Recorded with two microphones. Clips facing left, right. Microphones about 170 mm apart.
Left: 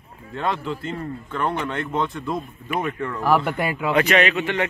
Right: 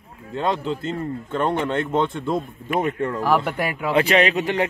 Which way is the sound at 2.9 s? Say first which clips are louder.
Right 4 dB; 40° right (ahead or behind).